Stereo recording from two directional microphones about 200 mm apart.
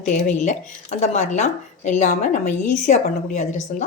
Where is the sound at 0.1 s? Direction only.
40° left (ahead or behind).